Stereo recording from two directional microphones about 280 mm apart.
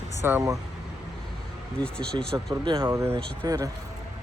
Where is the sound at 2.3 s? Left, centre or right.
Centre.